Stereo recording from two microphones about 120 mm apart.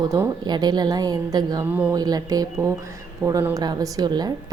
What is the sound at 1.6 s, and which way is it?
Speech, 10° right (ahead or behind).